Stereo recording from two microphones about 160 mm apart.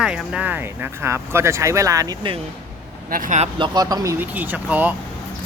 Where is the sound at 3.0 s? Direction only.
60° right (ahead or behind).